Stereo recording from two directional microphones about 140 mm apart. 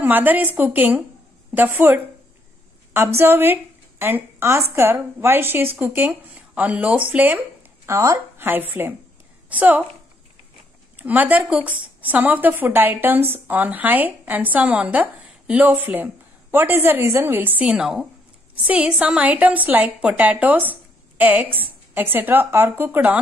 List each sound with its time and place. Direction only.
0.0 s speech: 10° right (ahead or behind)
7.8 s speech: 20° right (ahead or behind)
11.0 s a woman's voice: 10° right (ahead or behind)